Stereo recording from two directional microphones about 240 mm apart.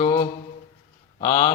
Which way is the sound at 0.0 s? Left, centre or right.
Left.